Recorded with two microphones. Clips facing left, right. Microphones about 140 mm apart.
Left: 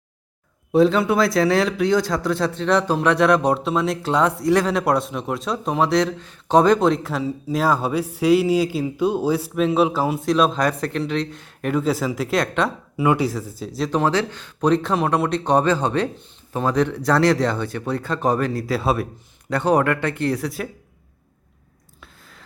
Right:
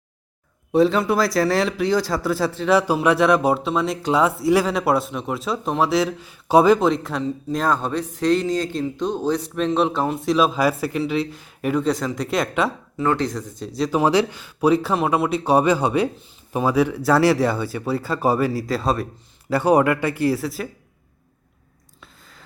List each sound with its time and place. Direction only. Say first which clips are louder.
0.7 s speech: left 1 dB; centre (ahead or behind)
13.0 s speech: left 2 dB; 10° left (ahead or behind)
14.0 s speech: right 2 dB; 10° right (ahead or behind)
19.5 s speech: right 2 dB; 10° right (ahead or behind)
22.0 s a sound: left 1 dB; centre (ahead or behind)